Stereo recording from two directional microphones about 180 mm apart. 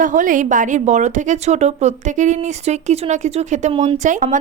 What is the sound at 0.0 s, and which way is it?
A woman's voice, 45° right (ahead or behind).